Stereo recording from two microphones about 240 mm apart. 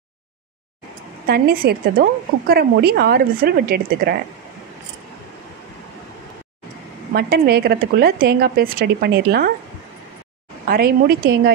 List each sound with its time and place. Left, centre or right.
1.2 s speech: right
7.2 s speech: right
10.7 s speech: right